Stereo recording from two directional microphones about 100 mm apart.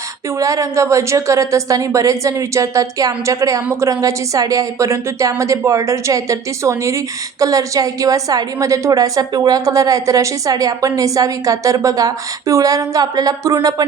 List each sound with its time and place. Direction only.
0.3 s a woman's voice: 35° right (ahead or behind)